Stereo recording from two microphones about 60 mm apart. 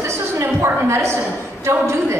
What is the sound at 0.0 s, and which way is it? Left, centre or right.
A woman's voice, right.